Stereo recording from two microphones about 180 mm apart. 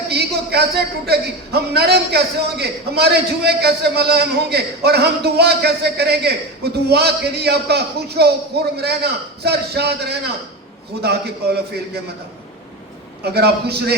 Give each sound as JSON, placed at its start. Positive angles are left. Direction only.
{"t": 0.1, "sound": "a man's voice", "side_deg": -65}
{"t": 13.2, "sound": "a man's voice", "side_deg": -65}